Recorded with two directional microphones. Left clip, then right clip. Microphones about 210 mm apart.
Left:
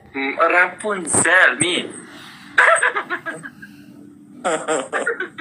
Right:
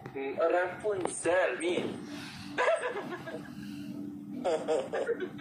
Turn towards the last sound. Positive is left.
turn(degrees=50)  # may be behind; listen again after turning